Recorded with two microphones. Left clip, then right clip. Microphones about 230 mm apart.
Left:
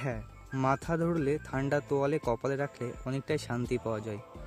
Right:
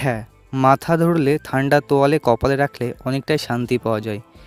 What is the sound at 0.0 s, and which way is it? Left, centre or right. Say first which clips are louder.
Speech: right 14 dB; right.